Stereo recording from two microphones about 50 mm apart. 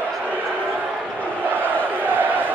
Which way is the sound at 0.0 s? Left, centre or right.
Right.